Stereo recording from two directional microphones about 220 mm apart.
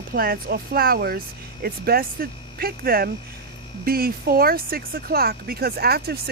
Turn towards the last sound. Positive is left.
turn(degrees=-45)  # may be behind; listen again after turning